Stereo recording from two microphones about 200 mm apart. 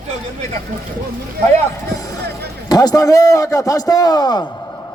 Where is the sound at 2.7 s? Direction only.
20° left (ahead or behind).